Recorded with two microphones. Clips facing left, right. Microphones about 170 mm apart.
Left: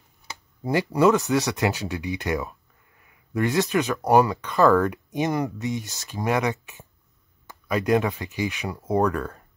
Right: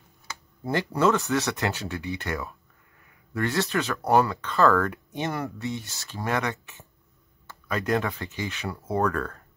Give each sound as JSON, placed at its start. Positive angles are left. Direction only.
{"t": 0.7, "sound": "speech", "side_deg": 15}